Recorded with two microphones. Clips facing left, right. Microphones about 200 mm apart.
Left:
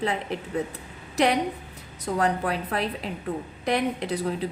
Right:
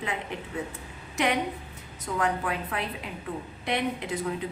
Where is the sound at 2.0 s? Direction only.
40° left (ahead or behind).